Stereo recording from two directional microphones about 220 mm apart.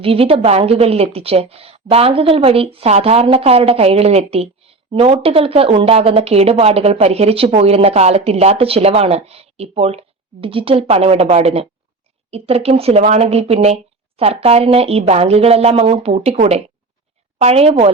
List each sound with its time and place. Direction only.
0.0 s a woman's voice: 25° right (ahead or behind)